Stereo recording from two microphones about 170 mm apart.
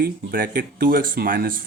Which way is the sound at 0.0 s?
60° right (ahead or behind).